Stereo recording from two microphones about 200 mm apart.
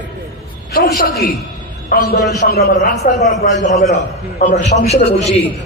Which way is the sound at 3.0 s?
35° left (ahead or behind).